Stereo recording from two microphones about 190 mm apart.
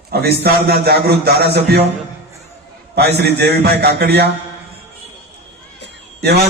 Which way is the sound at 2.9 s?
60° right (ahead or behind).